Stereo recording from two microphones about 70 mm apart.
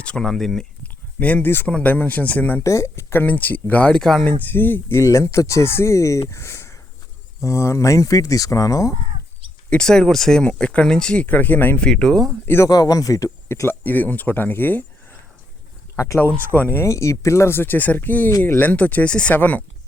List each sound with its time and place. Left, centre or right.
0.0 s speech: centre
1.2 s speech: left
2.6 s speech: left; by 4.3 s centre
4.4 s speech: left
4.9 s speech: left
9.6 s speech: centre
11.8 s speech: centre
12.6 s speech: left
13.5 s speech: left
16.0 s speech: left
16.5 s speech: left
16.8 s speech: left